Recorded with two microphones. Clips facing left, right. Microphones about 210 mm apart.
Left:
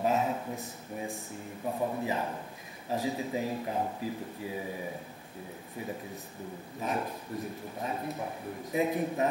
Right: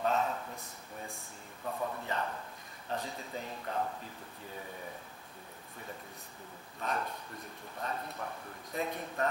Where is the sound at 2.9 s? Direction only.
5° left (ahead or behind).